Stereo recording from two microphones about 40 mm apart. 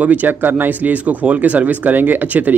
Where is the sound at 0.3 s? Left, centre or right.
Right.